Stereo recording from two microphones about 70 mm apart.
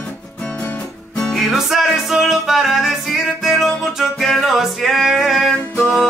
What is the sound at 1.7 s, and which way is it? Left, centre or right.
Music, centre.